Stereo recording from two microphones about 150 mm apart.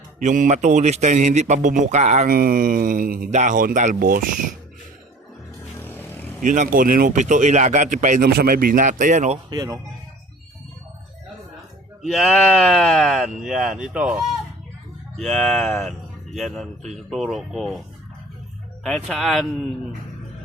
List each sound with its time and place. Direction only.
0.2 s a man's voice: 55° right (ahead or behind)
2.3 s mantra: 75° right (ahead or behind)
3.2 s speech: 50° right (ahead or behind); by 4.3 s 65° right (ahead or behind)
5.8 s vehicle: 15° left (ahead or behind)
6.4 s speech: 60° right (ahead or behind)
9.5 s speech: 25° right (ahead or behind)
12.0 s speech: centre (ahead or behind)
19.0 s speech: centre (ahead or behind)